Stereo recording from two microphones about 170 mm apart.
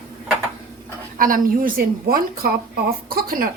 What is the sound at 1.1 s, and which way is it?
A woman's voice, 55° right (ahead or behind).